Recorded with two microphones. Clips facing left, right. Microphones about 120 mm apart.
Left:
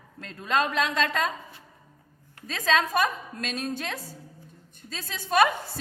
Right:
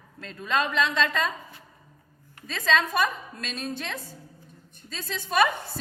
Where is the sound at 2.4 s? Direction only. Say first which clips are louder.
Even; 40° left (ahead or behind).